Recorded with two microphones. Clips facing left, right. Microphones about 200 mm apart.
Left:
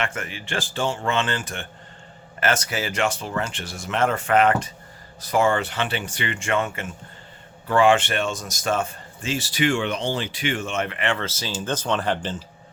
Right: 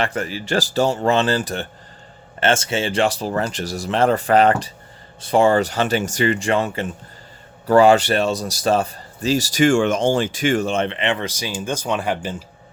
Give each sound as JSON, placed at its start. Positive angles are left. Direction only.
{"t": 0.0, "sound": "speech", "side_deg": -35}